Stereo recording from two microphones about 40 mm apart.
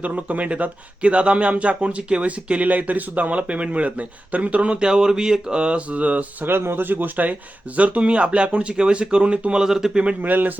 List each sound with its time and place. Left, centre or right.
0.0 s speech: right
4.8 s speech: centre; by 6.2 s right
6.4 s speech: right
7.8 s speech: right
9.6 s speech: centre
10.2 s speech: right